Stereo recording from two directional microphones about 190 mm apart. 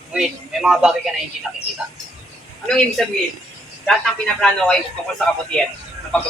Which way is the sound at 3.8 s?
5° left (ahead or behind).